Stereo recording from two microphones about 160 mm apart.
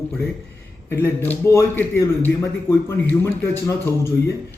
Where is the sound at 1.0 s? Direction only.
15° left (ahead or behind).